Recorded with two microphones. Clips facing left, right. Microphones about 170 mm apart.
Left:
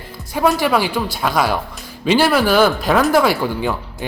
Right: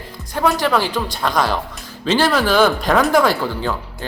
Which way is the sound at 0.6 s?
10° left (ahead or behind).